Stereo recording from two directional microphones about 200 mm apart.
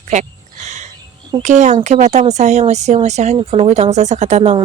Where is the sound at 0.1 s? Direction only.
35° right (ahead or behind).